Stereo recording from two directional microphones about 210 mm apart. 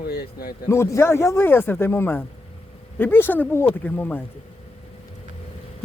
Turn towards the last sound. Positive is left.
turn(degrees=10)  # may be behind; listen again after turning